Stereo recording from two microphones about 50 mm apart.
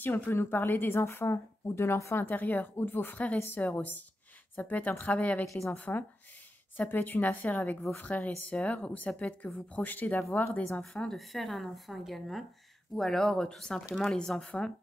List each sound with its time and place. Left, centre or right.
0.0 s a woman's voice: left
2.1 s a woman's voice: left
10.8 s a woman's voice: centre